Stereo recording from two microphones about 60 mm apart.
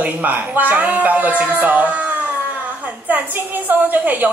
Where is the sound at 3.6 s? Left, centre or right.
Right.